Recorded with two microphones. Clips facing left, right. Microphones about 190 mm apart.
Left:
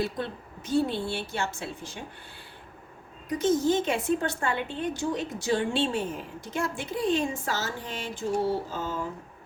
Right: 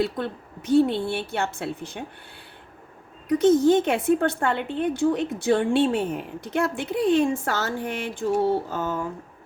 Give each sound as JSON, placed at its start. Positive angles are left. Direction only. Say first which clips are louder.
{"t": 0.0, "sound": "a woman's voice", "louder": "right 5 dB", "side_deg": -60}
{"t": 3.2, "sound": "a woman's voice", "louder": "right 7 dB", "side_deg": -60}